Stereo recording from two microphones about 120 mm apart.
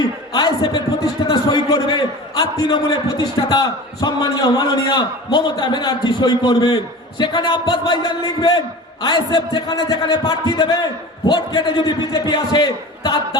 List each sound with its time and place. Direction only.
0.3 s a man's voice: 35° left (ahead or behind)